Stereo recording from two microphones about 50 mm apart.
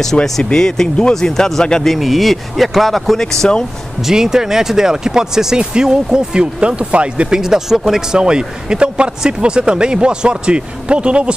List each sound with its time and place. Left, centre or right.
0.0 s speech: centre
2.0 s speech: centre
4.0 s speech: centre